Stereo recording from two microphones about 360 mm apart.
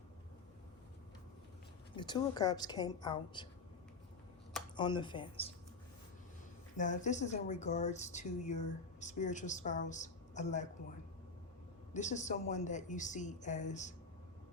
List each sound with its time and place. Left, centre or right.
2.0 s a woman's voice: centre
4.8 s a woman's voice: centre
6.7 s speech: centre
11.9 s speech: centre